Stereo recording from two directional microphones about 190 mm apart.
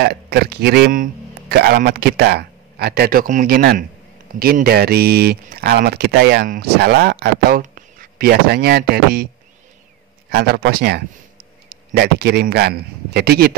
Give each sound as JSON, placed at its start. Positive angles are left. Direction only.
{"t": 0.0, "sound": "a man's voice", "side_deg": -60}
{"t": 10.3, "sound": "speech", "side_deg": -55}